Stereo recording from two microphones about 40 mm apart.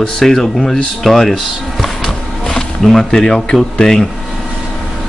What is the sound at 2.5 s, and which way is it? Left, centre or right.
Speech, centre.